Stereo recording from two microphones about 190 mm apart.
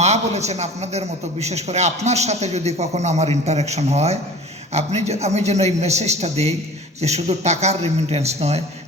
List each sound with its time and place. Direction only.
0.0 s a man's voice: 35° right (ahead or behind)